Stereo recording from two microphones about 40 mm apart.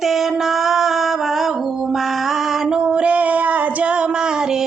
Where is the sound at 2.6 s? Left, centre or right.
Centre.